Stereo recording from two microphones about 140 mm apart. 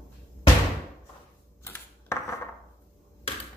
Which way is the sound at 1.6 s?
20° left (ahead or behind).